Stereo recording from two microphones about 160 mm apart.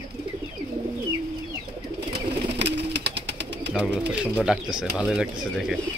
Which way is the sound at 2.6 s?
90° right.